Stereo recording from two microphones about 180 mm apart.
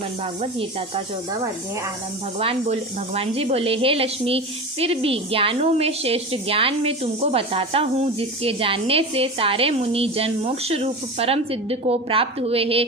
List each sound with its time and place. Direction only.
0.4 s a woman's voice: 30° right (ahead or behind)
2.4 s a woman's voice: 35° right (ahead or behind)